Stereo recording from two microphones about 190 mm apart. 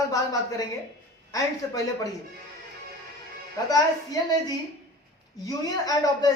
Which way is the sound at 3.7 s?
20° left (ahead or behind).